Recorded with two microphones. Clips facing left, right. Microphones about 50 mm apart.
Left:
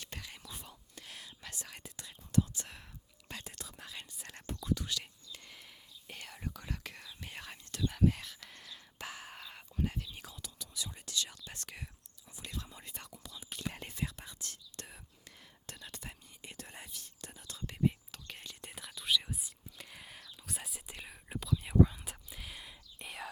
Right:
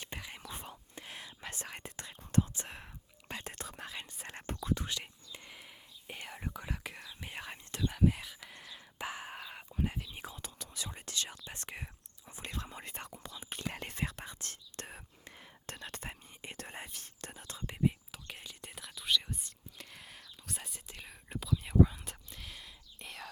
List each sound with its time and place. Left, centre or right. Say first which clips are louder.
0.0 s whispering: right 3 dB; right
0.4 s whispering: right 5 dB; right
3.5 s whispering: right 5 dB; right
3.9 s whispering: right 4 dB; right
7.9 s whispering: even; centre; by 10.5 s right
10.6 s whispering: left 1 dB; right
11.4 s whispering: right 3 dB; right
12.4 s whispering: right 3 dB; right
13.7 s whispering: right 1 dB; right
13.9 s whispering: right 2 dB; right
17.8 s whispering: even; centre
20.8 s whispering: left 1 dB; centre
21.1 s whispering: even; centre